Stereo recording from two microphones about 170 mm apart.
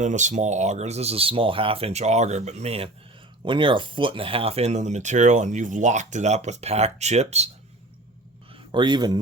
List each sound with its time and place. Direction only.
0.0 s speech: 45° right (ahead or behind)
8.5 s a man's voice: 25° right (ahead or behind)